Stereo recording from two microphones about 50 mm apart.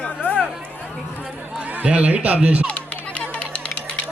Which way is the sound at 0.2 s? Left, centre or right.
Left.